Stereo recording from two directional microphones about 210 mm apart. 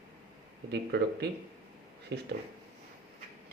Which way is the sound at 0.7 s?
50° right (ahead or behind).